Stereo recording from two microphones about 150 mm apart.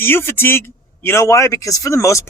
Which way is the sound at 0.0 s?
15° left (ahead or behind).